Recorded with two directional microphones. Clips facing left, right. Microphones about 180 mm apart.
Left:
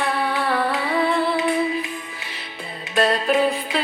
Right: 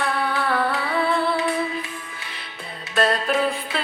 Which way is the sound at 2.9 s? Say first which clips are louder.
Left 2 dB; centre (ahead or behind).